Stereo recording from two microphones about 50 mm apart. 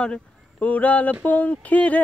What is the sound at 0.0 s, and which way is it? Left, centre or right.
Speech, left.